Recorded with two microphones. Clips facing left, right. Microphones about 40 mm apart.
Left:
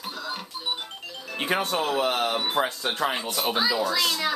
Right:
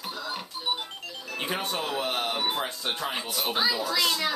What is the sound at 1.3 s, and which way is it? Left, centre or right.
Music, left.